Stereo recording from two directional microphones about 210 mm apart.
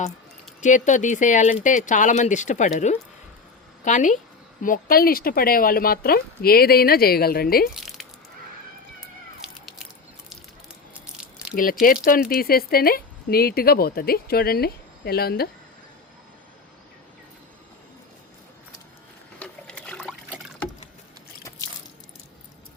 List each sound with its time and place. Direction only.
0.6 s speech: 35° left (ahead or behind)
7.7 s a sound: centre (ahead or behind)
11.5 s speech: 40° left (ahead or behind)
19.4 s water: 5° left (ahead or behind)